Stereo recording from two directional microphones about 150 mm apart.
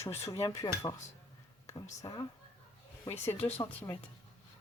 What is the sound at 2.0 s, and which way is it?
Speech, 25° left (ahead or behind).